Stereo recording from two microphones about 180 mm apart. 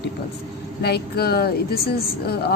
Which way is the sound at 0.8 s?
60° left (ahead or behind).